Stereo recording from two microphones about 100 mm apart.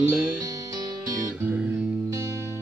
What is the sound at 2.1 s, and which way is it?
Music, 30° right (ahead or behind).